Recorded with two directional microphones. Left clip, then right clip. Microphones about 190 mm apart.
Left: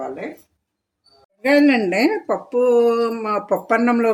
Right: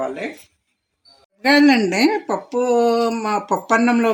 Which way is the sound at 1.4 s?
30° right (ahead or behind).